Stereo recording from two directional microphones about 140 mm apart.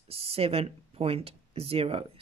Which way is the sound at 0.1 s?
45° right (ahead or behind).